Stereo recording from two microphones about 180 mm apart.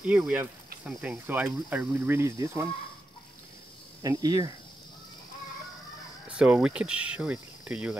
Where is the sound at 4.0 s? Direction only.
20° right (ahead or behind).